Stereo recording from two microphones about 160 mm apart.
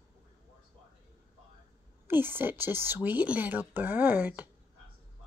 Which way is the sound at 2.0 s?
15° right (ahead or behind).